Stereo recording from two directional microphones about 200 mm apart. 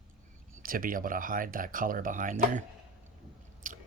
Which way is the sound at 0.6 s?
45° right (ahead or behind).